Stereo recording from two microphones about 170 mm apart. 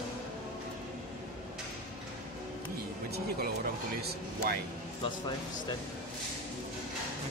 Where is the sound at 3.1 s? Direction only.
65° right (ahead or behind).